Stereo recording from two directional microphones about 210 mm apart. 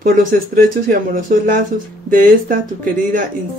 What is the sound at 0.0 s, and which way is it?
Speech, 40° right (ahead or behind).